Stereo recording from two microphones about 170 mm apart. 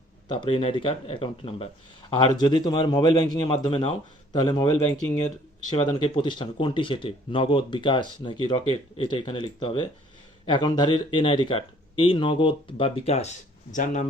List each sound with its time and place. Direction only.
0.3 s speech: 30° left (ahead or behind)
13.7 s speech: 50° left (ahead or behind)